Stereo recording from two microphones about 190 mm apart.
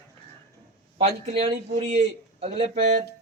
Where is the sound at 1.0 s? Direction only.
35° right (ahead or behind).